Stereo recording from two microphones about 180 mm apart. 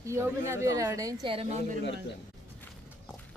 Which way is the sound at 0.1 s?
15° right (ahead or behind).